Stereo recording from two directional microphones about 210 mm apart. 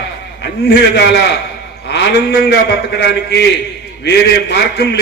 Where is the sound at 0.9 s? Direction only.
55° left (ahead or behind).